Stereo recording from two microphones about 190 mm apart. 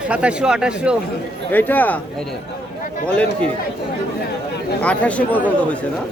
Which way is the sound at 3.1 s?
5° left (ahead or behind).